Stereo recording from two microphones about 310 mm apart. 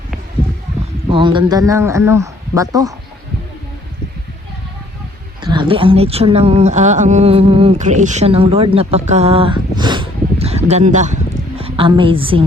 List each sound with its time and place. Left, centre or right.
1.1 s speech: centre
5.4 s speech: centre